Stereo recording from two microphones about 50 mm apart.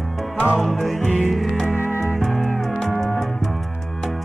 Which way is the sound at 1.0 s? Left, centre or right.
Centre.